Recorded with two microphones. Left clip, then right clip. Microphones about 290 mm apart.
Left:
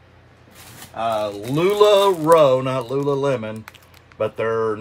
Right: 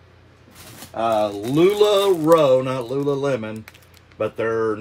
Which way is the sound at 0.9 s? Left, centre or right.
Centre.